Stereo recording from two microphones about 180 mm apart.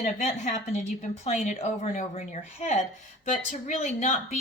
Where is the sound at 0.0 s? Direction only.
40° left (ahead or behind).